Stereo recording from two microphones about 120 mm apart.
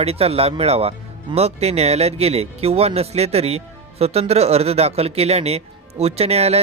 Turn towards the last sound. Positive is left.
turn(degrees=-60)  # may be behind; listen again after turning